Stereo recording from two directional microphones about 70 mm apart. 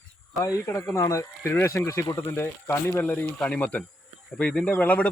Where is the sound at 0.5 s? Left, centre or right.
Left.